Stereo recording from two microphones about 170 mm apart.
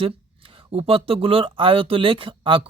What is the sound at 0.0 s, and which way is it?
Speech, 30° right (ahead or behind).